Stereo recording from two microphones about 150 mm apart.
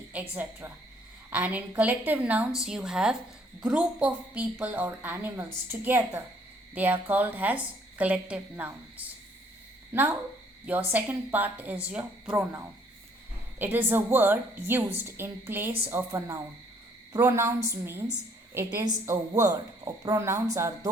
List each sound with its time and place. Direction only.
0.1 s a woman's voice: 10° right (ahead or behind)